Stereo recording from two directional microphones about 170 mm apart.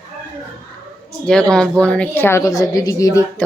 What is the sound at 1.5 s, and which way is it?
A woman's voice, 5° left (ahead or behind).